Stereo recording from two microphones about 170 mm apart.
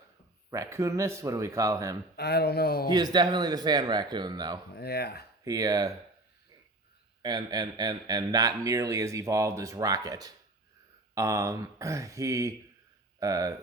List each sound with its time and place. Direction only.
0.5 s speech: 15° right (ahead or behind)
2.1 s speech: 70° left (ahead or behind)
2.9 s speech: 25° right (ahead or behind)
4.7 s speech: 70° left (ahead or behind)
5.5 s speech: 20° right (ahead or behind)
7.2 s speech: 25° right (ahead or behind)